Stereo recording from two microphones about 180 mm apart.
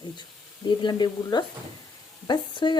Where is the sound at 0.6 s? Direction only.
25° left (ahead or behind).